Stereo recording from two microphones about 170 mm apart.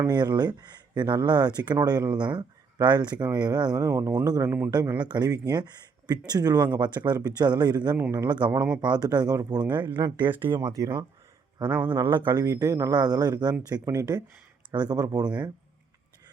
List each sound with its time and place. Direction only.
0.0 s speech: 25° right (ahead or behind)
4.7 s speech: 25° right (ahead or behind)
10.2 s speech: 10° right (ahead or behind)